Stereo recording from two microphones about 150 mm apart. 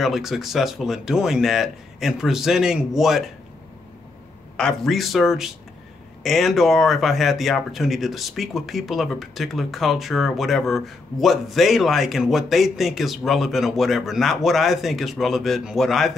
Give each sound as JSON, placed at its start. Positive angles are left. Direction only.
{"t": 0.0, "sound": "speech", "side_deg": 0}
{"t": 4.6, "sound": "speech", "side_deg": 5}